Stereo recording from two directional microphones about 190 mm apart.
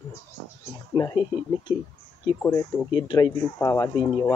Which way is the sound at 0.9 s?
20° left (ahead or behind).